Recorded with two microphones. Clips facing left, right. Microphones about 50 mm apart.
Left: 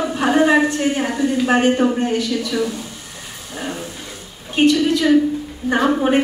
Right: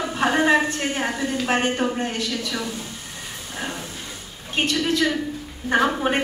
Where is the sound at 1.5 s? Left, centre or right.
Centre.